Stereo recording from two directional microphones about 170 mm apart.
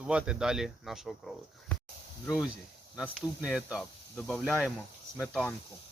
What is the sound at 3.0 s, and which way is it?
Speech, 5° right (ahead or behind).